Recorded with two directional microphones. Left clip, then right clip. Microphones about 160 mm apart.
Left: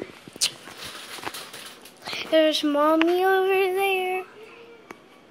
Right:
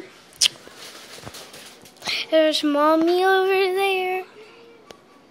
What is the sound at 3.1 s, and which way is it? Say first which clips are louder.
Child singing: right 3 dB; 20° right (ahead or behind).